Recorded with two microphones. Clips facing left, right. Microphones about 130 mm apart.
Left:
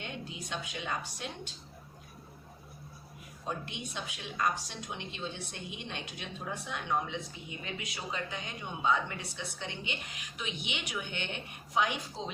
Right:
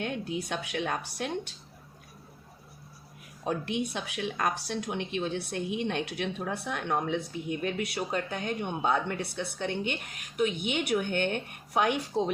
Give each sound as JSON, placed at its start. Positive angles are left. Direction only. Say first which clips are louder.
{"t": 0.0, "sound": "speech", "louder": "right 9 dB", "side_deg": -55}
{"t": 3.4, "sound": "speech", "louder": "right 9 dB", "side_deg": -60}